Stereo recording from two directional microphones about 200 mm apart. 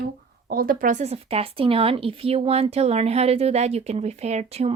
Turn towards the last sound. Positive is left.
turn(degrees=-30)  # may be behind; listen again after turning